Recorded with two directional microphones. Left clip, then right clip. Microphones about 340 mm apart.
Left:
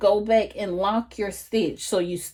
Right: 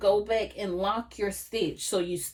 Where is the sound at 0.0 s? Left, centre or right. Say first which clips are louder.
Left 5 dB; left.